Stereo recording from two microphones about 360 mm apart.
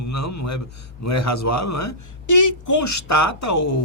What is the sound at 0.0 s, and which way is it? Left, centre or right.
Speech, left.